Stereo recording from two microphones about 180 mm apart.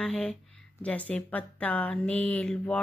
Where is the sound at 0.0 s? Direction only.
5° left (ahead or behind).